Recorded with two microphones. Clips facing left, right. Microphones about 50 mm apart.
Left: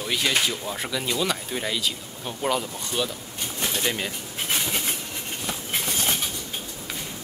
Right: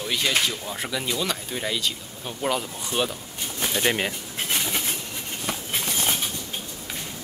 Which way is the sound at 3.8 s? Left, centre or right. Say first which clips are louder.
Right 6 dB; right.